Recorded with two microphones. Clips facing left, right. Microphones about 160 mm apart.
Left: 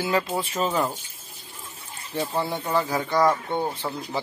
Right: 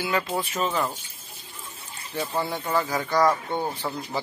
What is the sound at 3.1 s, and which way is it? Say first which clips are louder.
Speech: even; centre (ahead or behind).